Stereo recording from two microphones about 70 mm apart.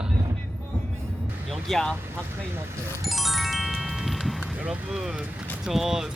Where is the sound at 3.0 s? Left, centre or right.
Centre.